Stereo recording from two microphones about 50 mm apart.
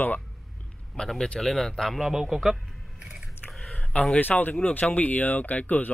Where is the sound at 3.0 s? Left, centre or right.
Right.